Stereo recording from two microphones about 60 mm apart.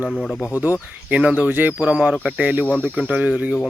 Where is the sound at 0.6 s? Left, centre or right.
Right.